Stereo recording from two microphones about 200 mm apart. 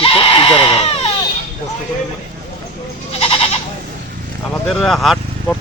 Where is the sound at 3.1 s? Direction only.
30° left (ahead or behind).